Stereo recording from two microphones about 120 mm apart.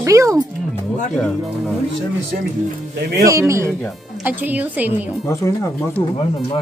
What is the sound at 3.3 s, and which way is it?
A woman's voice, 25° right (ahead or behind).